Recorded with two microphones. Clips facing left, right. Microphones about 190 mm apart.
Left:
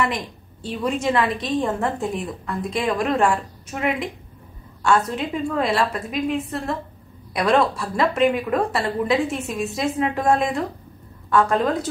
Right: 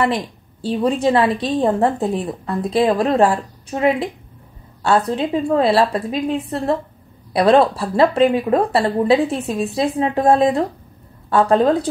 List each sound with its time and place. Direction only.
0.0 s a woman's voice: 35° right (ahead or behind)